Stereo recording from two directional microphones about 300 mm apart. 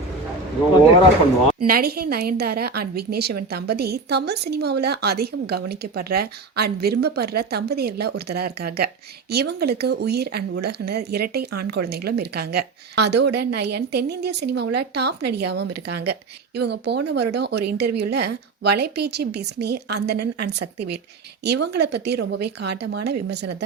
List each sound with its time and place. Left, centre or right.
1.5 s a woman's voice: right